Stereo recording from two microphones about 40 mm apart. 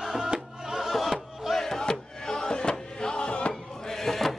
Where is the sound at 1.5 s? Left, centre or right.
Centre; by 3.5 s left.